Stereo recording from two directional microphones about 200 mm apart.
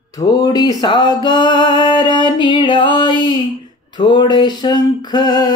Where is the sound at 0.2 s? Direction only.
20° left (ahead or behind).